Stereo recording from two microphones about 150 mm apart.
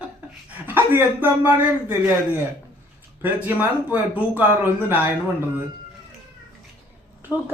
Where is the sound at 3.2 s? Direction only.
10° right (ahead or behind).